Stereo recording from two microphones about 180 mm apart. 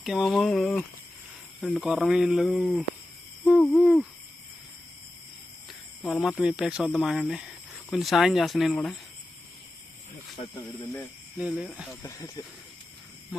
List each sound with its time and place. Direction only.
0.0 s speech: centre (ahead or behind)
3.4 s hoot: 5° left (ahead or behind)
6.0 s speech: centre (ahead or behind)
11.3 s speech: 5° right (ahead or behind)
12.0 s speech: 20° left (ahead or behind)